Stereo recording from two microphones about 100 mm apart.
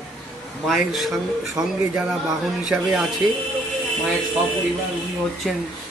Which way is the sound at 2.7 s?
Centre (ahead or behind).